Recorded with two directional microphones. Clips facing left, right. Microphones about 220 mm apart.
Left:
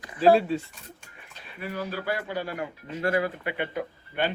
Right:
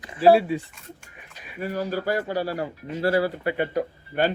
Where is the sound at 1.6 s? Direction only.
40° right (ahead or behind).